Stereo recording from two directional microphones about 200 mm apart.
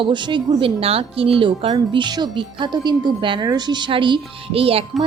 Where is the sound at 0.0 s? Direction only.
25° right (ahead or behind).